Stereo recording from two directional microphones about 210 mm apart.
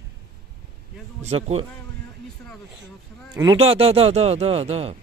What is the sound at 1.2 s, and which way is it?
Speech, 30° right (ahead or behind).